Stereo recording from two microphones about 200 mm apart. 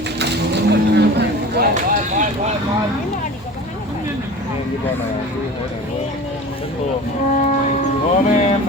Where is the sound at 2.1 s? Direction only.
35° right (ahead or behind).